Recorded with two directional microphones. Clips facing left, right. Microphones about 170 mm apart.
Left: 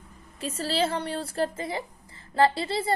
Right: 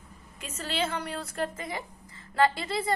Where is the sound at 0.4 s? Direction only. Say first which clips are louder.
Left 5 dB; 35° left (ahead or behind).